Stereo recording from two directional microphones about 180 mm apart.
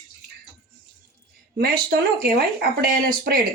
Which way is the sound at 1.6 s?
55° right (ahead or behind).